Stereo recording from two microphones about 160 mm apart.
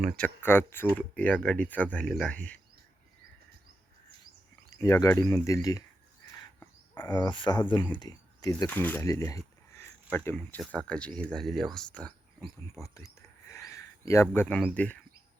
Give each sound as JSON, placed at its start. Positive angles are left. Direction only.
{"t": 0.2, "sound": "speech", "side_deg": 15}
{"t": 4.7, "sound": "speech", "side_deg": 20}
{"t": 6.9, "sound": "speech", "side_deg": 25}
{"t": 8.7, "sound": "speech", "side_deg": 10}
{"t": 9.7, "sound": "a sound", "side_deg": 15}
{"t": 10.3, "sound": "speech", "side_deg": 5}